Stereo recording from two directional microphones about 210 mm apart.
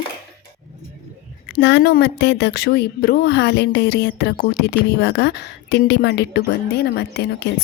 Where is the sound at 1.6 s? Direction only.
55° left (ahead or behind).